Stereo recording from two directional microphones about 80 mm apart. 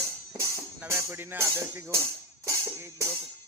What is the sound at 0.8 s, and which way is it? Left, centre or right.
Speech, right.